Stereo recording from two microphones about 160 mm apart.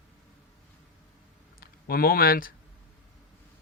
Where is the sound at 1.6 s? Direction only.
65° left (ahead or behind).